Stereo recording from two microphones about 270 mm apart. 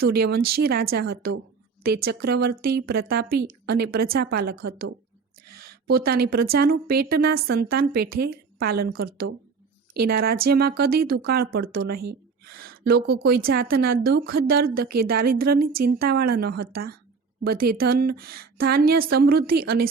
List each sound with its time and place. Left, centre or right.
0.0 s speech: right